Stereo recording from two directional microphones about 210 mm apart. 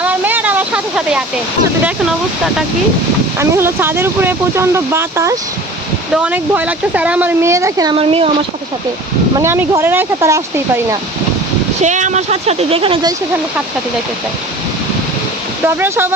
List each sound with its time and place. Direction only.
0.0 s a sound: 10° right (ahead or behind)
3.3 s speech: 10° right (ahead or behind); by 8.3 s 25° right (ahead or behind)
9.4 s speech: 10° right (ahead or behind)
11.8 s speech: 35° right (ahead or behind)
15.6 s speech: 10° right (ahead or behind)